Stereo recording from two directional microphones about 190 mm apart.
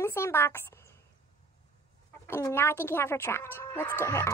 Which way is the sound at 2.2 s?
15° left (ahead or behind).